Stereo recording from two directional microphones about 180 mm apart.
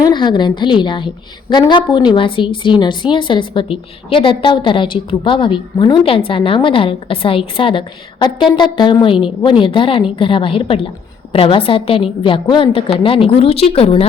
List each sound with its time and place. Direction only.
0.0 s a woman's voice: 25° left (ahead or behind)